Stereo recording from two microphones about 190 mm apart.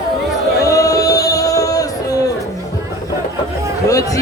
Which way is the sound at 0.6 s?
15° left (ahead or behind).